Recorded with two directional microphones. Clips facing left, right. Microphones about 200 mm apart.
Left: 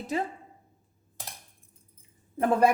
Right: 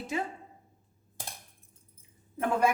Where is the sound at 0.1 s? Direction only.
35° left (ahead or behind).